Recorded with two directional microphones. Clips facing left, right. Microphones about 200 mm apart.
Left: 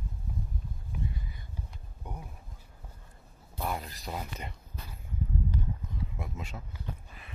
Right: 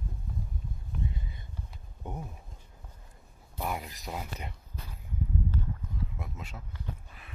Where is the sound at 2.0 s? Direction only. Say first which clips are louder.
Right 4 dB; 25° right (ahead or behind).